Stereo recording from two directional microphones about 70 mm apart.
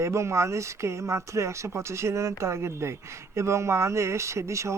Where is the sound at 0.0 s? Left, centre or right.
Right.